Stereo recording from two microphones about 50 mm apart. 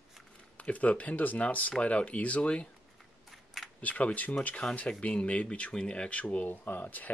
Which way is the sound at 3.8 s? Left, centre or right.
Left.